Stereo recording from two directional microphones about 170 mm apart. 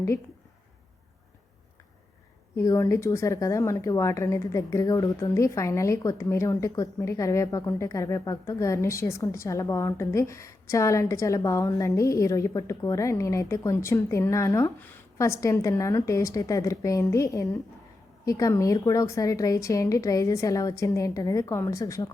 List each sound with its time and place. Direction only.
2.6 s speech: 20° left (ahead or behind)